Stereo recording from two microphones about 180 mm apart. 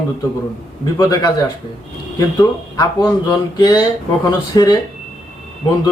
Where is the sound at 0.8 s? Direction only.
20° left (ahead or behind).